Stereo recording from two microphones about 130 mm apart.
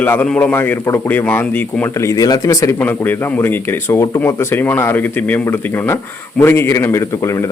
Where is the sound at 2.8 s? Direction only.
15° left (ahead or behind).